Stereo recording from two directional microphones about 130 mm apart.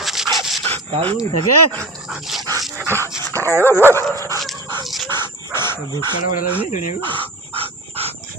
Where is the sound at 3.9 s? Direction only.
20° left (ahead or behind).